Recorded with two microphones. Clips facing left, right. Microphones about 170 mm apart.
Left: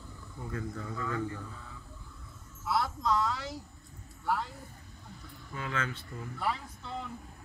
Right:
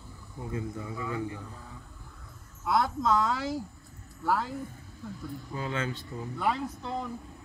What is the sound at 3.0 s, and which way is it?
Speech, 90° right.